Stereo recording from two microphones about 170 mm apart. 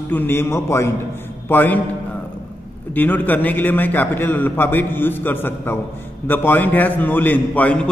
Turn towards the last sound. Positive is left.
turn(degrees=10)  # may be behind; listen again after turning